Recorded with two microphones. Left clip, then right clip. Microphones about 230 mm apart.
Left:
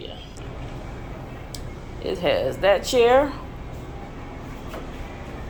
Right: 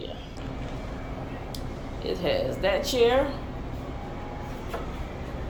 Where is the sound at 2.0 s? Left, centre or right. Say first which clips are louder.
Left 5 dB; centre.